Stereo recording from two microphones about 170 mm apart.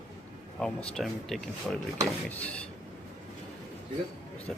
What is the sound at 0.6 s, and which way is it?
Speech, centre (ahead or behind).